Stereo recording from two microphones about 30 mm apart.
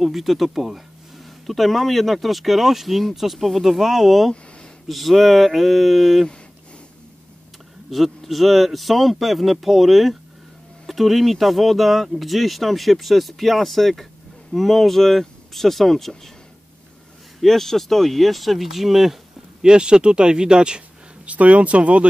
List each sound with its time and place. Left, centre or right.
0.0 s speech: centre
0.7 s a sound: centre
1.5 s speech: centre
7.9 s speech: centre
17.4 s speech: centre
19.6 s speech: right
21.3 s speech: right